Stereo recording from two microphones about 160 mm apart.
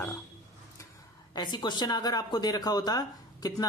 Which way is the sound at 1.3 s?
25° left (ahead or behind).